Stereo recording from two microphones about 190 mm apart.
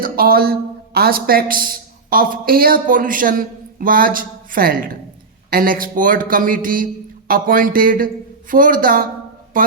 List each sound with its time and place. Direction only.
0.0 s a man's voice: 50° right (ahead or behind)